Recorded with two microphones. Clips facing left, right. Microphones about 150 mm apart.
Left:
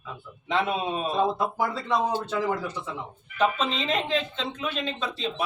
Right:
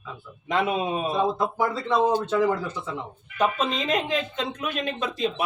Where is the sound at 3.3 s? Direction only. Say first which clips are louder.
Right 1 dB; 15° right (ahead or behind).